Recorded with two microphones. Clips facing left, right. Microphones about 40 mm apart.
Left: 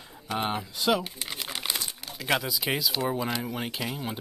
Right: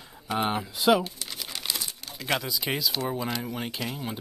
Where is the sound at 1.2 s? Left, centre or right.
Left.